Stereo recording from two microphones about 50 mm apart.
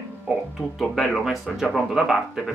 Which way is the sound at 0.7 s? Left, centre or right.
Centre.